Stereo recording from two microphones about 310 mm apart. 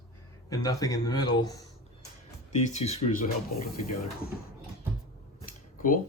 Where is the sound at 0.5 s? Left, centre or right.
Centre.